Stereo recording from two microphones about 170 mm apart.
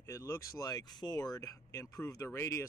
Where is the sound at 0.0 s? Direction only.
15° left (ahead or behind).